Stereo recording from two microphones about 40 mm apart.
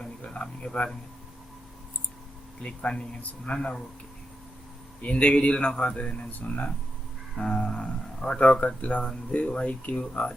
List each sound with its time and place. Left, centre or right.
0.0 s speech: left
2.6 s speech: left
5.0 s speech: left
6.1 s speech: left
7.3 s speech: left